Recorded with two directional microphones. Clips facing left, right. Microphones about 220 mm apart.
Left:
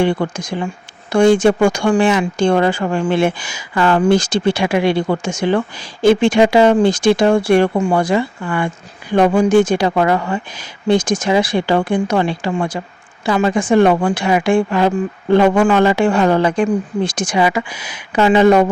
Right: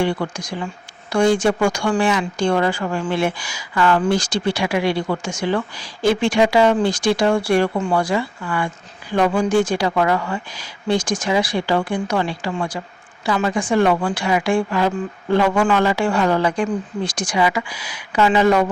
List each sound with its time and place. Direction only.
0.3 s speech: 25° left (ahead or behind)